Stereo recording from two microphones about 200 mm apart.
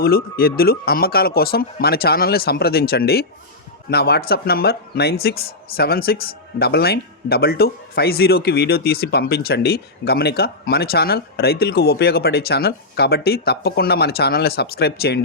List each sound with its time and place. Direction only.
0.0 s speech: 50° left (ahead or behind)